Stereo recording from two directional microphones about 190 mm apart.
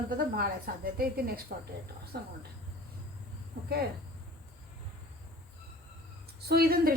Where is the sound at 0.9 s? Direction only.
50° right (ahead or behind).